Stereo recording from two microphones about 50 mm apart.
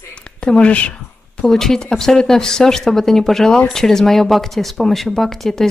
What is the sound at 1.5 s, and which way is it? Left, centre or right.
Speech, centre.